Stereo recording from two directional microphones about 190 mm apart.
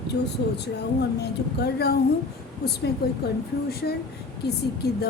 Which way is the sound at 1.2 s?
60° left (ahead or behind).